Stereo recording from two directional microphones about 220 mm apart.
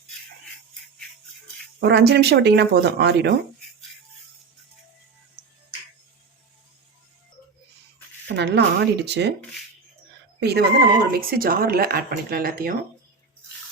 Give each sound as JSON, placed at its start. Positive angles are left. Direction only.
{"t": 1.8, "sound": "speech", "side_deg": -50}
{"t": 8.4, "sound": "speech", "side_deg": -50}
{"t": 10.4, "sound": "speech", "side_deg": -45}